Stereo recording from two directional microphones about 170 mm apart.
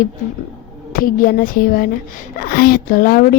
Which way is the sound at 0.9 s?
55° left (ahead or behind).